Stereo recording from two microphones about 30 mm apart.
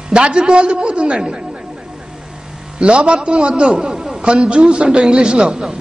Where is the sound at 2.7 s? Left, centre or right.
Right.